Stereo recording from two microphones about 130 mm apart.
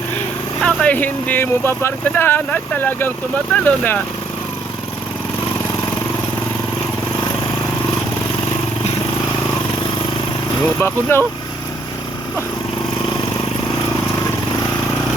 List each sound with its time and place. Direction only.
0.6 s speech: 10° left (ahead or behind)
10.8 s speech: 15° left (ahead or behind)